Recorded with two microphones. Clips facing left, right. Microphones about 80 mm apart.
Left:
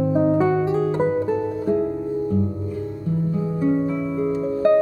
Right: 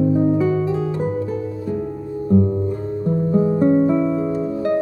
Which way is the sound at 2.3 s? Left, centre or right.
Right.